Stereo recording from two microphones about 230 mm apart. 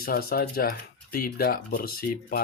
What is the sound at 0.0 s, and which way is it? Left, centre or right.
Speech, left.